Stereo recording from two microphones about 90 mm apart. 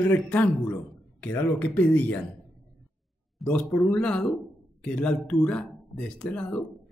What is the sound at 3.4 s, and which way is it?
Speech, 15° left (ahead or behind).